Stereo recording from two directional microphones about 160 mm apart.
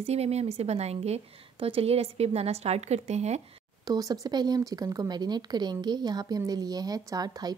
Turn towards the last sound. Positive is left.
turn(degrees=-25)  # may be behind; listen again after turning